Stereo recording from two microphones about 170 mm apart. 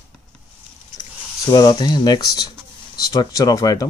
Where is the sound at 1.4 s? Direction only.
25° left (ahead or behind).